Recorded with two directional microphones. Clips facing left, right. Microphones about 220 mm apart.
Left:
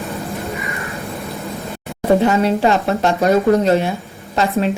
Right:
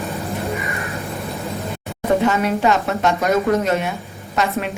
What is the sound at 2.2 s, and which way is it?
A woman's voice, 30° left (ahead or behind).